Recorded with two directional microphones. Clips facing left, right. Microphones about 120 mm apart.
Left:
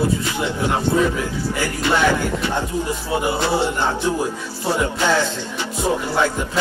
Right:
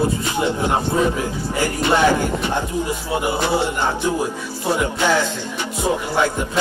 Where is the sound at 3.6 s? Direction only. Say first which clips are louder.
Even; 10° right (ahead or behind).